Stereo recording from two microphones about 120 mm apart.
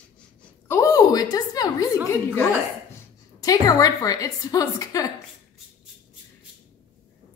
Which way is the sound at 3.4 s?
30° left (ahead or behind).